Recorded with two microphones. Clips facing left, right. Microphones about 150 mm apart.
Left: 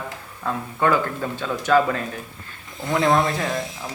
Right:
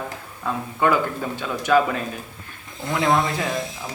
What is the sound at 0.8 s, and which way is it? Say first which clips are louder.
Speech: even; 15° right (ahead or behind).